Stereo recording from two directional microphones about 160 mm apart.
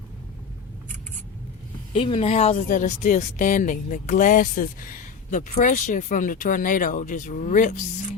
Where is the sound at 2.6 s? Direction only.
55° left (ahead or behind).